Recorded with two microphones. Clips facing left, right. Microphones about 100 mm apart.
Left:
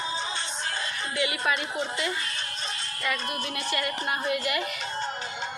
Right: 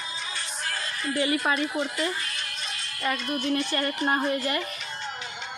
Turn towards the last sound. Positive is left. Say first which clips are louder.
# right 3 dB
turn(degrees=-35)  # may be behind; listen again after turning